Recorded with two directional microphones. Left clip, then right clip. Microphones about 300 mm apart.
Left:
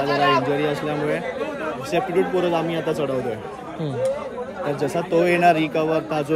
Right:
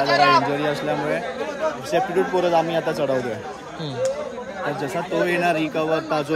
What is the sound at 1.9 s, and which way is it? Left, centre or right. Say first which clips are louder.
Speech: even; centre.